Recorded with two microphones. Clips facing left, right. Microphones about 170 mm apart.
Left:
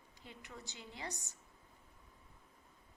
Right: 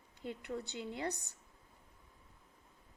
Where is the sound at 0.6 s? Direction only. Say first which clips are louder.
Right 8 dB; 60° right (ahead or behind).